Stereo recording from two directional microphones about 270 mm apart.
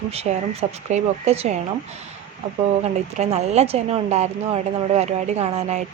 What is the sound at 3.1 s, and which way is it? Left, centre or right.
A woman's voice, right.